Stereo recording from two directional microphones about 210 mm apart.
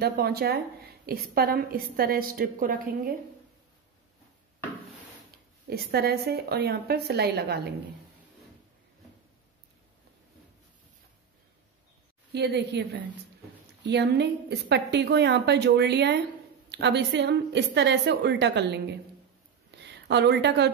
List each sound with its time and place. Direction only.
0.0 s a woman's voice: 50° right (ahead or behind)
5.7 s a woman's voice: 50° right (ahead or behind)
12.3 s a woman's voice: 55° right (ahead or behind)
13.8 s a woman's voice: 55° right (ahead or behind)